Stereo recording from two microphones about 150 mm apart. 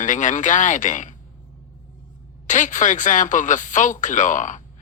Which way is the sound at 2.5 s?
55° left (ahead or behind).